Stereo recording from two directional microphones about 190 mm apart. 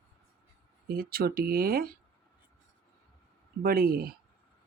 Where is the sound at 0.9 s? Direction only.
50° right (ahead or behind).